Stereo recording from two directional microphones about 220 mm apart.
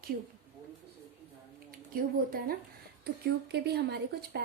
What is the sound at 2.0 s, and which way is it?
A woman's voice, 40° right (ahead or behind).